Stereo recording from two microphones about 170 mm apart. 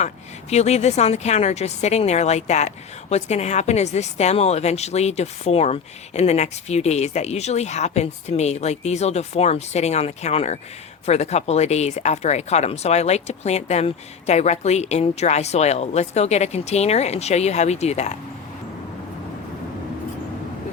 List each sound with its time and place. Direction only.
0.5 s speech: 40° left (ahead or behind)